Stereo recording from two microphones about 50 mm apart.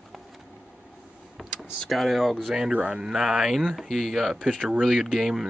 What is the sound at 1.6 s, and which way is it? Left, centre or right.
Speech, centre.